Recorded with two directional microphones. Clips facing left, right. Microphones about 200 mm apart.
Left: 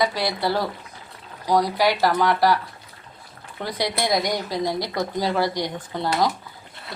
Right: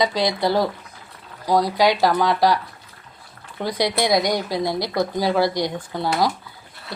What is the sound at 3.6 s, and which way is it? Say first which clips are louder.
Speech: right 4 dB; 15° right (ahead or behind).